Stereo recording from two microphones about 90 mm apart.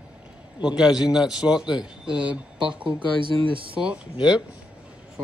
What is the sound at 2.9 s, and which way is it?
Speech, 65° right (ahead or behind).